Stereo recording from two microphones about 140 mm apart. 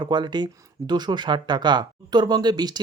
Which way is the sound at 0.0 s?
30° right (ahead or behind).